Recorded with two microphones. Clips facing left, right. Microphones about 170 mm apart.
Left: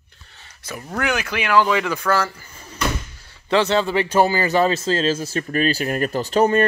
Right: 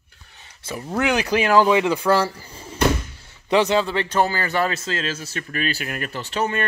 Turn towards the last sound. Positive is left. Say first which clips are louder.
# left 8 dB
turn(degrees=40)  # may be behind; listen again after turning